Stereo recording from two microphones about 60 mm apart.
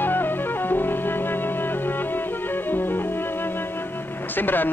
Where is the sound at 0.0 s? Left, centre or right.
Left.